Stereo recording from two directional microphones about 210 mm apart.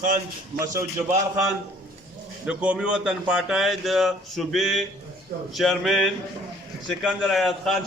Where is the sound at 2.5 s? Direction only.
5° right (ahead or behind).